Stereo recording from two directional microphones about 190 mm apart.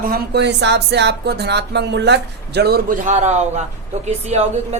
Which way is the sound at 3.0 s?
35° right (ahead or behind).